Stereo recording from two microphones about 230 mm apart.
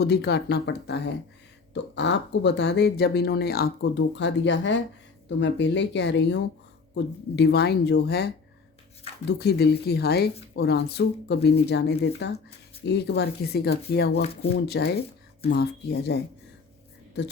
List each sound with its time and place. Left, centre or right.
0.0 s speech: left
9.4 s speech: left